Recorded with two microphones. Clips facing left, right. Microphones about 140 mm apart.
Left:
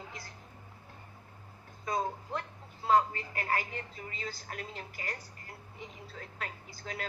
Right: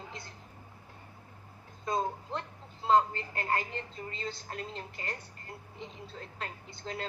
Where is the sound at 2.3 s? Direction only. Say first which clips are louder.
Even; 25° right (ahead or behind).